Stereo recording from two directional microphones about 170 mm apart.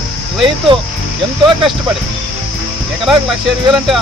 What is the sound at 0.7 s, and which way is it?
Speech, 25° right (ahead or behind).